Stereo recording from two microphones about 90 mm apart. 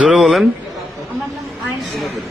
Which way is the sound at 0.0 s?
5° right (ahead or behind).